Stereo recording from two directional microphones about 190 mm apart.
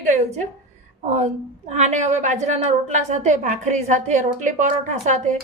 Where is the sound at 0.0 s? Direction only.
35° right (ahead or behind).